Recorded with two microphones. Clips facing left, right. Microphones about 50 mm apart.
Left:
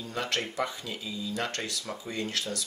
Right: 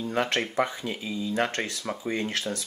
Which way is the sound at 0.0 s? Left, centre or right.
Right.